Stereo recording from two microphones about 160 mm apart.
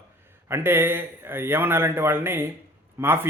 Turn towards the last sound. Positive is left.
turn(degrees=-15)  # may be behind; listen again after turning